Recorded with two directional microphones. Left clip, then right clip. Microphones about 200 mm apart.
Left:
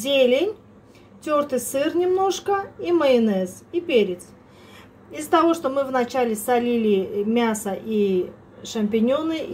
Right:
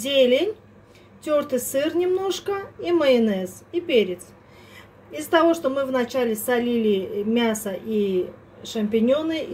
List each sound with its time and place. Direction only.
0.0 s a woman's voice: centre (ahead or behind)
5.2 s a woman's voice: centre (ahead or behind)